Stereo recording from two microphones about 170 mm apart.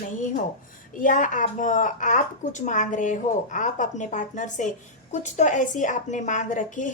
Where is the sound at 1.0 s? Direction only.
50° left (ahead or behind).